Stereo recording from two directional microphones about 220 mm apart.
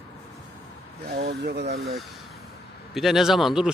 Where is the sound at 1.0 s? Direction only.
50° right (ahead or behind).